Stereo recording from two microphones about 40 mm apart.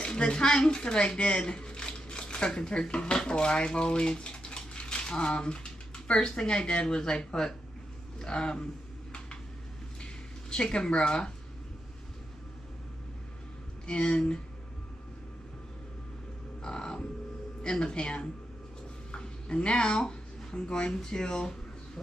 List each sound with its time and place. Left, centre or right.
0.0 s a woman's voice: left
10.5 s a woman's voice: left
13.8 s a woman's voice: left
16.6 s music: centre
17.6 s a woman's voice: centre